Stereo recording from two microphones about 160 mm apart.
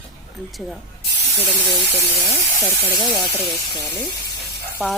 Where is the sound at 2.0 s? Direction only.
20° left (ahead or behind).